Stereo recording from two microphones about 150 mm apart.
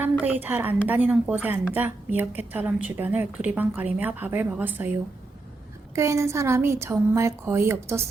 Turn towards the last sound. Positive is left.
turn(degrees=-20)  # may be behind; listen again after turning